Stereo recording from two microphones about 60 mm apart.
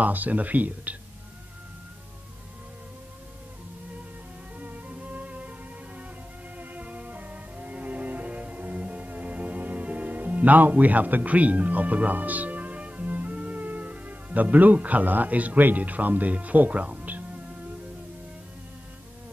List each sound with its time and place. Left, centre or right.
0.0 s speech: right
4.6 s music: right
6.6 s music: right